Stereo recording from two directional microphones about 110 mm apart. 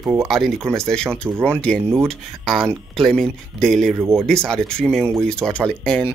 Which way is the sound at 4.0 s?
25° right (ahead or behind).